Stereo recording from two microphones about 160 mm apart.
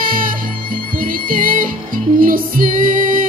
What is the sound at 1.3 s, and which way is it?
Music, 60° right (ahead or behind).